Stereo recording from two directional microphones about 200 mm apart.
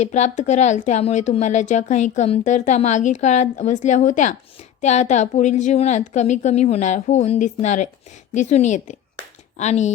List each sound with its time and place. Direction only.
0.0 s speech: 35° left (ahead or behind)